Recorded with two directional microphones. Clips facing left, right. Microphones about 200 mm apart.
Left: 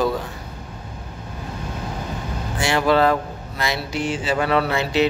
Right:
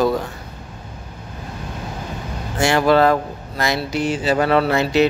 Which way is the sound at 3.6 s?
40° right (ahead or behind).